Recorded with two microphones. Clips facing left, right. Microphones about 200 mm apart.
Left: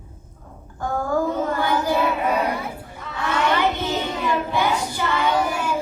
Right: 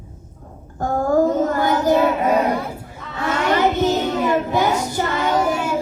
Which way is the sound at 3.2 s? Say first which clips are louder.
Right 3 dB; 45° right (ahead or behind).